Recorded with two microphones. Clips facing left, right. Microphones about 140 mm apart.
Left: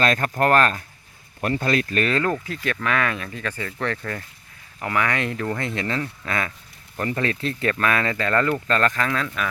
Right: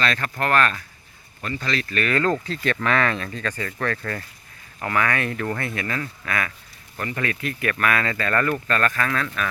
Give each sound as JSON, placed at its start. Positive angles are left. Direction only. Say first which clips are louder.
{"t": 0.0, "sound": "speech", "louder": "left 4 dB", "side_deg": 45}
{"t": 1.4, "sound": "speech", "louder": "left 5 dB", "side_deg": 55}
{"t": 2.2, "sound": "speech", "louder": "right 2 dB", "side_deg": 10}